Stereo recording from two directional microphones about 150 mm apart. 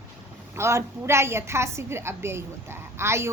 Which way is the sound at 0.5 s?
20° right (ahead or behind).